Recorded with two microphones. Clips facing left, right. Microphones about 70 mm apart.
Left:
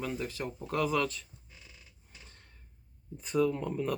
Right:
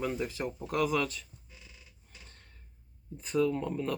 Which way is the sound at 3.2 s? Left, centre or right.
Centre.